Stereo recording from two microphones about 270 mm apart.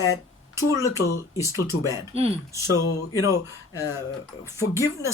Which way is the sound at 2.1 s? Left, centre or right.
Right.